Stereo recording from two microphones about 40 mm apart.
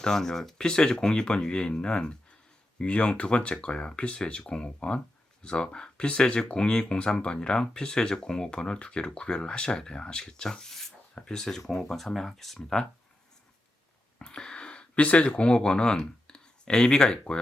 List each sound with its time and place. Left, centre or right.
0.0 s speech: centre
0.6 s speech: left
14.2 s speech: left